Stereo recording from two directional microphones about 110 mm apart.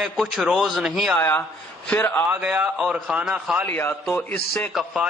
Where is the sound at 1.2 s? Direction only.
20° left (ahead or behind).